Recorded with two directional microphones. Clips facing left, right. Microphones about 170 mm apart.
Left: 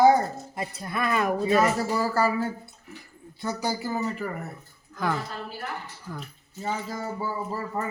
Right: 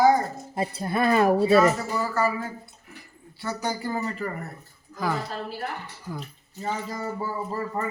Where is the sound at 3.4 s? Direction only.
10° left (ahead or behind).